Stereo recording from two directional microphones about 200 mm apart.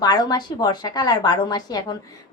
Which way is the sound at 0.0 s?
20° left (ahead or behind).